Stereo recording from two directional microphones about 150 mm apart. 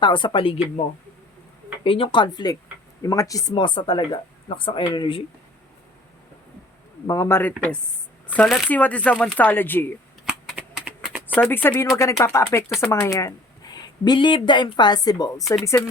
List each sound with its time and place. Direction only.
0.0 s speech: 35° left (ahead or behind)
1.8 s speech: 35° left (ahead or behind)
7.1 s speech: 20° left (ahead or behind)
10.2 s a sound: 5° right (ahead or behind)
11.3 s speech: 15° left (ahead or behind)